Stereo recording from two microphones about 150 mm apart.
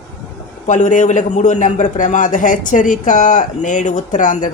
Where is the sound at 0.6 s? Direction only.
55° left (ahead or behind).